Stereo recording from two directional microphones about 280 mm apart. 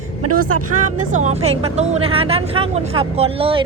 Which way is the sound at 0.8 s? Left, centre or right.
Right.